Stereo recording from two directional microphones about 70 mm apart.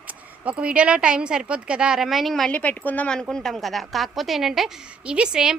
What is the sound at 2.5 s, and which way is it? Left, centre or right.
Speech, left.